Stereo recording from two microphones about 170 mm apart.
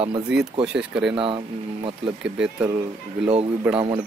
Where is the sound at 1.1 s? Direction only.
30° right (ahead or behind).